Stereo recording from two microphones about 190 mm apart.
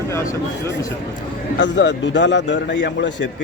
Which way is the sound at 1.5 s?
70° left (ahead or behind).